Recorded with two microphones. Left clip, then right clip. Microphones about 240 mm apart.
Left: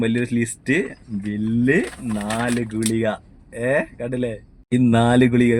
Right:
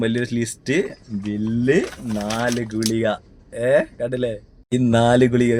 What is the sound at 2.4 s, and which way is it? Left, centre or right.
Speech, right.